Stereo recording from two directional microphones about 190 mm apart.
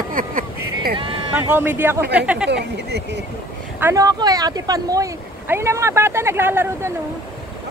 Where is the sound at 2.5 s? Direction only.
65° right (ahead or behind).